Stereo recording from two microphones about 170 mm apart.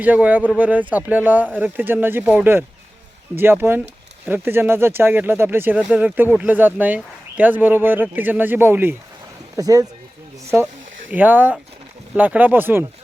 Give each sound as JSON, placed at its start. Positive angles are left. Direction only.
{"t": 0.0, "sound": "speech", "side_deg": -10}
{"t": 11.1, "sound": "speech", "side_deg": -10}